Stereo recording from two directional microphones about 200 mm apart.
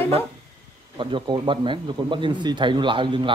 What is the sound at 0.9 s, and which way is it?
Speech, 20° right (ahead or behind).